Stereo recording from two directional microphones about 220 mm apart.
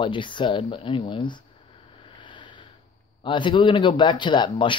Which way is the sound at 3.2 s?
20° left (ahead or behind).